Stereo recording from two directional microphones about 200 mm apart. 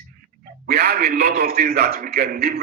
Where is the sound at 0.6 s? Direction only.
55° right (ahead or behind).